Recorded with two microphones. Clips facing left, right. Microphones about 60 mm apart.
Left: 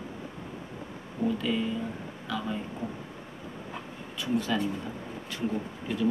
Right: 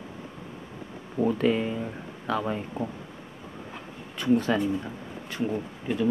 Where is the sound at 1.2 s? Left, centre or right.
Right.